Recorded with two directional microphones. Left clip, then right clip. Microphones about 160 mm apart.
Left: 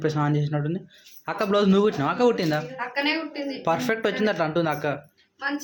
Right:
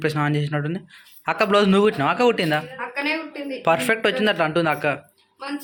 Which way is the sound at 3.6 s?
5° right (ahead or behind).